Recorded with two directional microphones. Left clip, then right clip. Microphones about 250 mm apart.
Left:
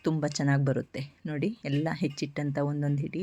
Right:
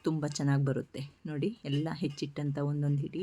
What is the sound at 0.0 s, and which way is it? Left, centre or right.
Speech, centre.